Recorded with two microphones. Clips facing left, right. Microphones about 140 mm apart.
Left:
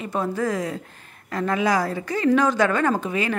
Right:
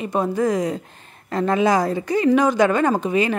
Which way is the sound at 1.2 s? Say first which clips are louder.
Right 4 dB; 30° right (ahead or behind).